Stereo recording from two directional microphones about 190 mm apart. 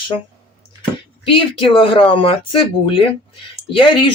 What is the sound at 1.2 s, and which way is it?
Speech, 25° left (ahead or behind).